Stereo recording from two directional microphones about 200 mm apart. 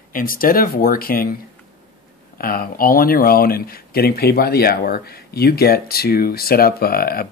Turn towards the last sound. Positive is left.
turn(degrees=50)  # may be behind; listen again after turning